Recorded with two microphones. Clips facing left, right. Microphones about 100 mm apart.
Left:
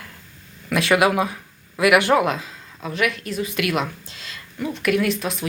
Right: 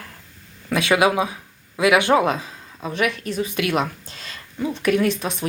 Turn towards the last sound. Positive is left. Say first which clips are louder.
# right 1 dB
turn(degrees=-35)  # may be behind; listen again after turning